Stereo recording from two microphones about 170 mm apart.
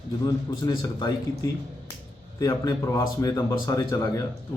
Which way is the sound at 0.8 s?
25° left (ahead or behind).